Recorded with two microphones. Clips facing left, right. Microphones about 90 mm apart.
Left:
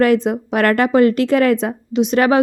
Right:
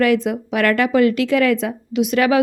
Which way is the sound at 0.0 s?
40° left (ahead or behind).